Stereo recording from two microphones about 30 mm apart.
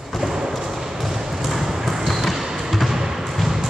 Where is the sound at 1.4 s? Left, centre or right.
Centre.